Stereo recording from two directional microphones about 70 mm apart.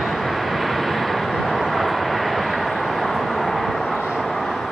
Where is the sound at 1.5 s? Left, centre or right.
Centre.